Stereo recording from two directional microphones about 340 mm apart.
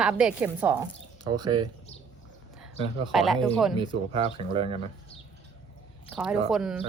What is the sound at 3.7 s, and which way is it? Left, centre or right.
Speech, centre.